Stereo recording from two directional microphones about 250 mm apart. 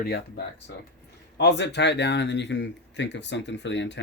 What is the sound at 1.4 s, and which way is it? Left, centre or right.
Speech, left.